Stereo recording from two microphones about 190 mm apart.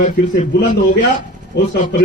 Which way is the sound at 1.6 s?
60° left (ahead or behind).